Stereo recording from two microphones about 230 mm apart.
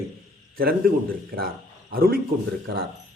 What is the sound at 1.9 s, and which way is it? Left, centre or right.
Speech, right.